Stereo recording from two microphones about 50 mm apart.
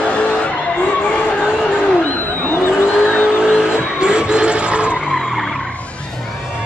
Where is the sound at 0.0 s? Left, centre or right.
Left.